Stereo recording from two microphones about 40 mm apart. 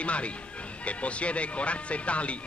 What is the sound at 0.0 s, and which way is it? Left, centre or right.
Speech, left.